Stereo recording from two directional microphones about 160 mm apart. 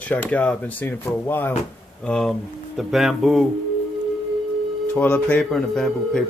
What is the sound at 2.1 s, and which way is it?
Speech, centre (ahead or behind).